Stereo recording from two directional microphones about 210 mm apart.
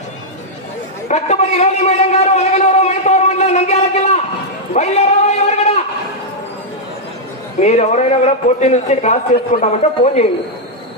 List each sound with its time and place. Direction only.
1.0 s a man's voice: 30° left (ahead or behind)
4.7 s a sound: 30° left (ahead or behind)
7.6 s a man's voice: 30° left (ahead or behind)